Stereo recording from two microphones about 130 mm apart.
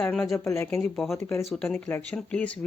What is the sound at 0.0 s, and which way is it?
Speech, 5° left (ahead or behind).